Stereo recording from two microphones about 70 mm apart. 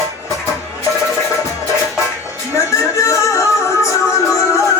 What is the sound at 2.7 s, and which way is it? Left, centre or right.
Music, left.